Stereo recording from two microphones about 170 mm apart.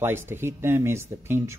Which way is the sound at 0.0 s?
15° right (ahead or behind).